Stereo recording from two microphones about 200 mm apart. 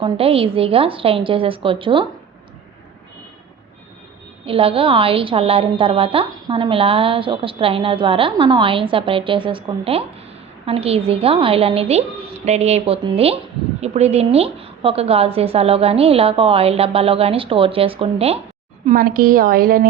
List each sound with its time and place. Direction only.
0.0 s a woman's voice: 30° right (ahead or behind)
4.4 s a woman's voice: 25° right (ahead or behind)
18.9 s a woman's voice: 45° right (ahead or behind)